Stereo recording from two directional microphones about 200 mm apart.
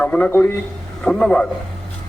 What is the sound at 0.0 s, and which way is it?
A man's voice, 10° left (ahead or behind).